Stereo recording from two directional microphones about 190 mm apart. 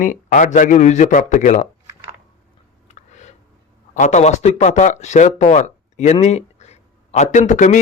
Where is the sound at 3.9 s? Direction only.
40° left (ahead or behind).